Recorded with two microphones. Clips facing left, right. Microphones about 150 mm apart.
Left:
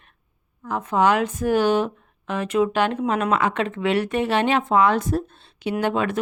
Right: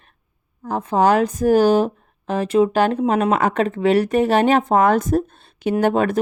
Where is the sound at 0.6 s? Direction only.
35° right (ahead or behind).